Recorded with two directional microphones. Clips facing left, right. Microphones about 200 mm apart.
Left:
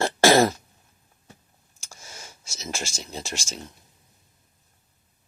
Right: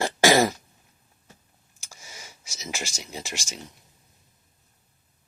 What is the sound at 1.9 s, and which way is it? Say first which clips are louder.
Speech: left 2 dB; 10° right (ahead or behind).